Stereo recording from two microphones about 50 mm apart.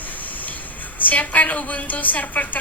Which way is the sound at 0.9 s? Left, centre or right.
Left.